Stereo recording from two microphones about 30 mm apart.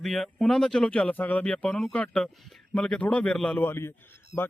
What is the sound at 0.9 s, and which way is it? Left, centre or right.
Speech, left.